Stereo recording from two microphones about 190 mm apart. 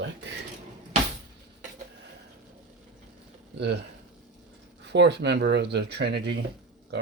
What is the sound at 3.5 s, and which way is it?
Speech, 60° right (ahead or behind).